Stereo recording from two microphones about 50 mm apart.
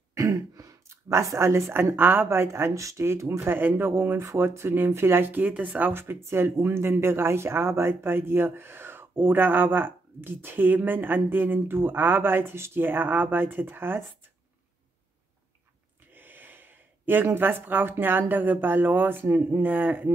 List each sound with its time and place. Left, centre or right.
0.8 s speech: right
3.4 s speech: right
4.2 s speech: right
4.9 s speech: right
5.9 s speech: right
16.1 s speech: right